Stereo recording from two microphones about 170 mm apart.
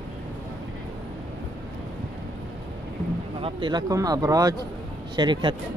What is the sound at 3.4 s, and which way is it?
Speech, 30° right (ahead or behind).